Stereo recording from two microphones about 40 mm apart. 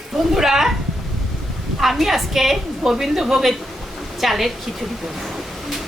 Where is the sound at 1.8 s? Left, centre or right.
Centre.